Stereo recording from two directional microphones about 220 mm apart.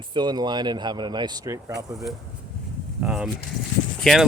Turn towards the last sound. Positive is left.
turn(degrees=0)  # may be behind; listen again after turning